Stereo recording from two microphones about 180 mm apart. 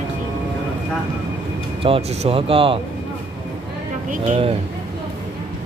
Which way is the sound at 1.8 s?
30° right (ahead or behind).